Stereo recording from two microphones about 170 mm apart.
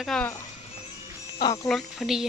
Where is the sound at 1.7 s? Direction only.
Centre (ahead or behind).